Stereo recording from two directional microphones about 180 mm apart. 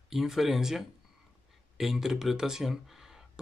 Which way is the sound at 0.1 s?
Centre (ahead or behind).